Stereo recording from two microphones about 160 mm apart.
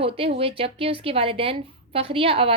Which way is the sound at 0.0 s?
35° right (ahead or behind).